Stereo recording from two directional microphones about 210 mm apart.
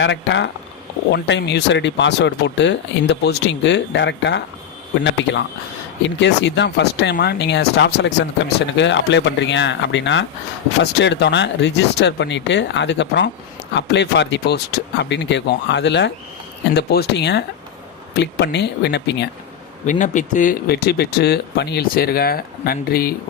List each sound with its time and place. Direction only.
0.0 s speech: 60° left (ahead or behind)
6.0 s speech: 55° left (ahead or behind)
19.8 s speech: 35° left (ahead or behind)